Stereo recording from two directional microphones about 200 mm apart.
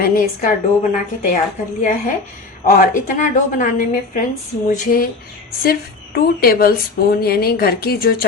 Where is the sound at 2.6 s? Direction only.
45° left (ahead or behind).